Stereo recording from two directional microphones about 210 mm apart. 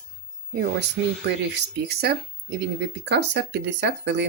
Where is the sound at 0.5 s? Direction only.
50° right (ahead or behind).